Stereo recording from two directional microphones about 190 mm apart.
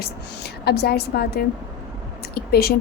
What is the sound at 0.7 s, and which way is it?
A woman's voice, 55° left (ahead or behind).